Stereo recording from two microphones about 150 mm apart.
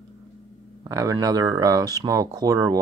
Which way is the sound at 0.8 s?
20° right (ahead or behind).